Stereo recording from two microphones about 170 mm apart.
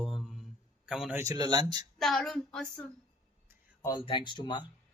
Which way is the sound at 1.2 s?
20° right (ahead or behind).